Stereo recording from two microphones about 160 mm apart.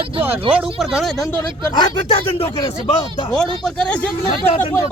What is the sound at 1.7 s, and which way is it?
Speech, 25° left (ahead or behind).